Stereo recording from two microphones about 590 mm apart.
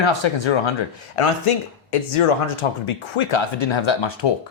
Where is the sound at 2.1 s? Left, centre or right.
Left.